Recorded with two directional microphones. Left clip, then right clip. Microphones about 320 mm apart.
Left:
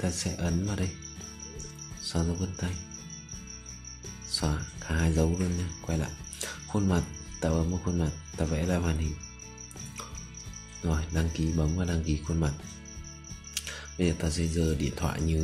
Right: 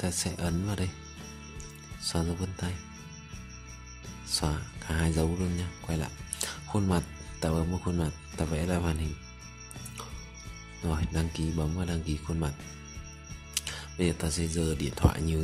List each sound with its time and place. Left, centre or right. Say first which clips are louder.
0.0 s speech: even; centre
2.0 s speech: even; centre
4.3 s speech: even; centre
10.8 s speech: left 1 dB; centre
13.6 s speech: even; centre